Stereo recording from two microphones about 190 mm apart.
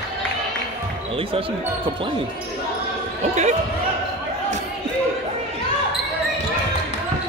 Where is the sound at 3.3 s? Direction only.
35° right (ahead or behind).